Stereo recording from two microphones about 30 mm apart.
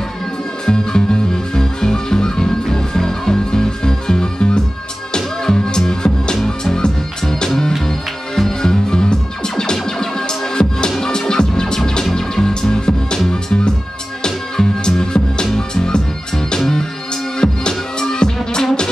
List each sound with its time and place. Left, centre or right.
0.7 s music: left
14.2 s music: left